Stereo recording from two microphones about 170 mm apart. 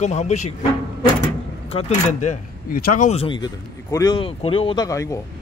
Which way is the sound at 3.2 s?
25° left (ahead or behind).